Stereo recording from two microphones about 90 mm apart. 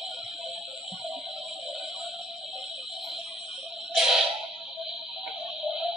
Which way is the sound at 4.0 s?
5° right (ahead or behind).